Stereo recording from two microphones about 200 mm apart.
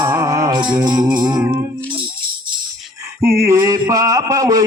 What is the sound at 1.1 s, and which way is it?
Music, 20° right (ahead or behind).